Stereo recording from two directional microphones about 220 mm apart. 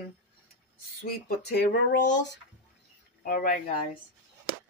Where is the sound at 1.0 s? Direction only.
45° left (ahead or behind).